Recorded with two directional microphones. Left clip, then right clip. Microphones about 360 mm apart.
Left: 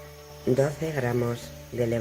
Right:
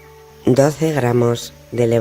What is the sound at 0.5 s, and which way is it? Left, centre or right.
Speech, right.